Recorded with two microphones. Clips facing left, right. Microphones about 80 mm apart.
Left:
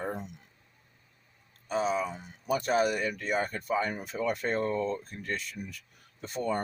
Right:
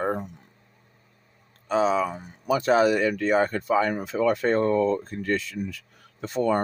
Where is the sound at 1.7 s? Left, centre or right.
Right.